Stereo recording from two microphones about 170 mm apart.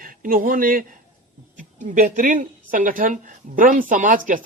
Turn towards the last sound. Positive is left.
turn(degrees=-50)  # may be behind; listen again after turning